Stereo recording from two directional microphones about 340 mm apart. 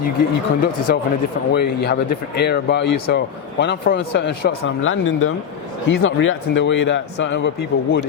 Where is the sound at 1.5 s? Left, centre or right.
Left.